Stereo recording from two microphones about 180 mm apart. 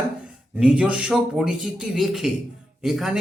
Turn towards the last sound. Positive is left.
turn(degrees=0)  # may be behind; listen again after turning